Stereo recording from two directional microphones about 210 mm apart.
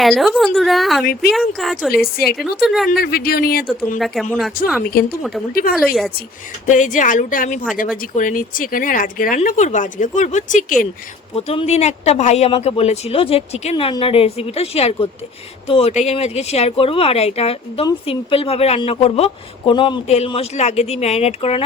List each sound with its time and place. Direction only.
0.0 s a woman's voice: centre (ahead or behind)
2.0 s speech: 45° left (ahead or behind)
2.6 s a woman's voice: centre (ahead or behind)
2.9 s speech: 45° left (ahead or behind)
3.7 s a woman's voice: centre (ahead or behind)
6.7 s speech: 35° left (ahead or behind)